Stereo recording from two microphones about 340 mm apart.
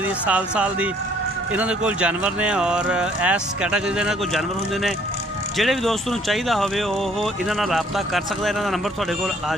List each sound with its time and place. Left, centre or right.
0.3 s speech: centre
5.6 s speech: centre